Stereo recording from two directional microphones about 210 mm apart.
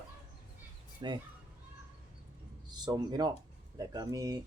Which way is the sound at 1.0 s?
20° right (ahead or behind).